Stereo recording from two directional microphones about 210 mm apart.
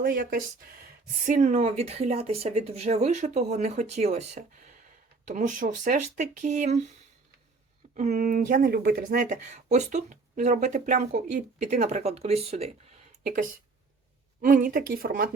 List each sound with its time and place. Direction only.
0.0 s speech: 45° right (ahead or behind)
7.9 s speech: 35° right (ahead or behind)